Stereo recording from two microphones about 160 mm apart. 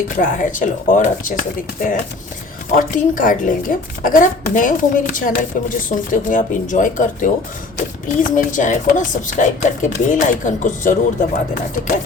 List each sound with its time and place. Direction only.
0.2 s a woman's voice: 55° left (ahead or behind)